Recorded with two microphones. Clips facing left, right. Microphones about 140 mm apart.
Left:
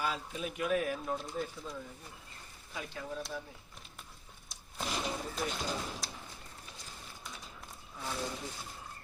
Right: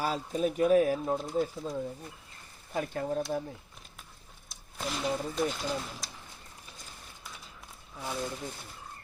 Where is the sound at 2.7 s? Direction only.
50° right (ahead or behind).